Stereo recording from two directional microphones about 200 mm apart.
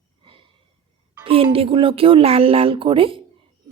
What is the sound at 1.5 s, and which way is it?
A woman's voice, 25° right (ahead or behind).